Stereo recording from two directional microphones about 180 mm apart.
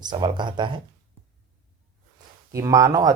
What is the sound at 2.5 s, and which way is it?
Speech, 20° right (ahead or behind).